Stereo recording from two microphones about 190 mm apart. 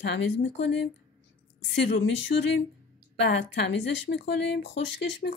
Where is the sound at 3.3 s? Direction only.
65° left (ahead or behind).